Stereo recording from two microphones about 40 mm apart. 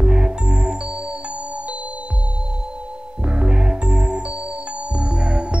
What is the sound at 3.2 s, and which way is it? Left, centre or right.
Music, right.